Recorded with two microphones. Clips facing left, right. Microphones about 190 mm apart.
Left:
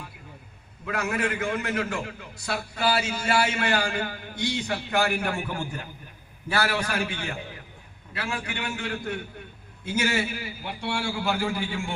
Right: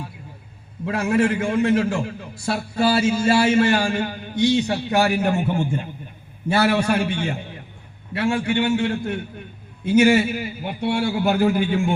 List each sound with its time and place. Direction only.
0.9 s a man's voice: 30° right (ahead or behind)